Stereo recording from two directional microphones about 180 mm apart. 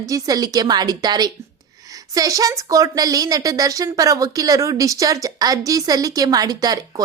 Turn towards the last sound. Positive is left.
turn(degrees=-20)  # may be behind; listen again after turning